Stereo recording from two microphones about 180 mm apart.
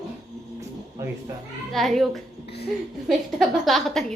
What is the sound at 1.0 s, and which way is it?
Speech, 15° right (ahead or behind).